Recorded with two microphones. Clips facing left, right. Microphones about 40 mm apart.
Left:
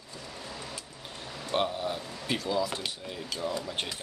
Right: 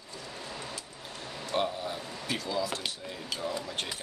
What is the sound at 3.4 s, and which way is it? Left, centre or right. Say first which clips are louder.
Speech: left 2 dB; centre.